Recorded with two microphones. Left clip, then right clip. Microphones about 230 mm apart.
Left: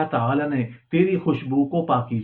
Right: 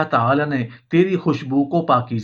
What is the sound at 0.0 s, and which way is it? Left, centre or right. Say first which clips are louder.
Speech: right 5 dB; right.